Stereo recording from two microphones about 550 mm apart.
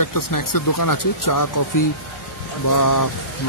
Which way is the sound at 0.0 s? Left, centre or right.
Left.